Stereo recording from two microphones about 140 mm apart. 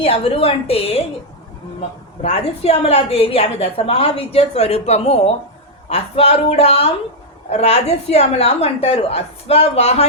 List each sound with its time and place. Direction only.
0.0 s a woman's voice: 45° left (ahead or behind)
2.2 s a woman's voice: 50° left (ahead or behind)